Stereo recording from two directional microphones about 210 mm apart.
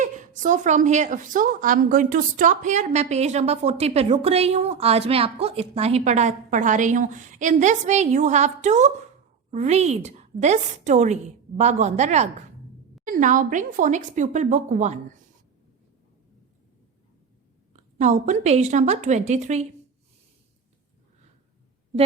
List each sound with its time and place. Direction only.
0.0 s a woman's voice: 35° right (ahead or behind)
17.9 s a woman's voice: 35° right (ahead or behind)